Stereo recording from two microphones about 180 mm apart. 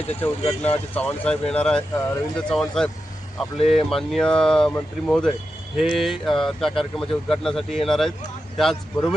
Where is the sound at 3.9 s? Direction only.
Centre (ahead or behind).